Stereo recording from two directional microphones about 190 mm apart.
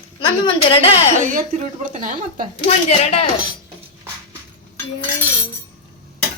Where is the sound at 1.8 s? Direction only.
45° right (ahead or behind).